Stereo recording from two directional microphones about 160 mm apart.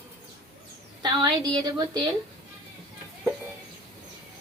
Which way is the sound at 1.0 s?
25° right (ahead or behind).